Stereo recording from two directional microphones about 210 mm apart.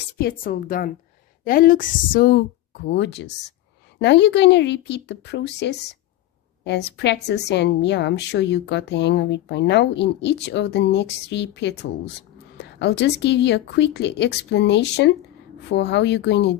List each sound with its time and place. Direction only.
0.2 s a woman's voice: 45° left (ahead or behind)